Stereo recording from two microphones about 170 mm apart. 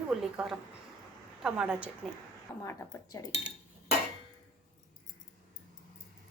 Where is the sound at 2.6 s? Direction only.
20° left (ahead or behind).